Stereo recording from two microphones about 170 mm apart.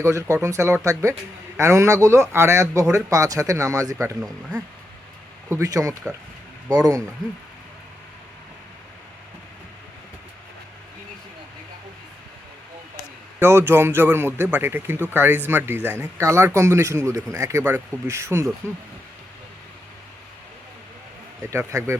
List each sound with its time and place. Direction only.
0.0 s a man's voice: 15° right (ahead or behind)
5.5 s speech: 20° right (ahead or behind)
13.4 s a man's voice: 15° right (ahead or behind)
21.5 s a man's voice: 15° right (ahead or behind)